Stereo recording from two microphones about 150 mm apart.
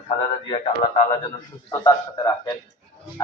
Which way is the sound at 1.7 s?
25° left (ahead or behind).